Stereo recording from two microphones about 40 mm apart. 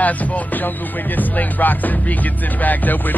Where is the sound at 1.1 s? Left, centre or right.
Left.